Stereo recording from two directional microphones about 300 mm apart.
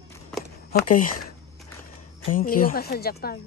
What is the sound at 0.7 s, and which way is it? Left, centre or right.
Speech, left.